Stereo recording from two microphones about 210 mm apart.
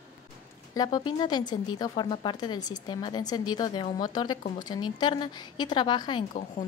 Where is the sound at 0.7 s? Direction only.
20° left (ahead or behind).